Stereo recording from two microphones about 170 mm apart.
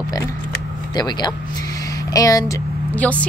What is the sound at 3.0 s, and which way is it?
Speech, 10° left (ahead or behind).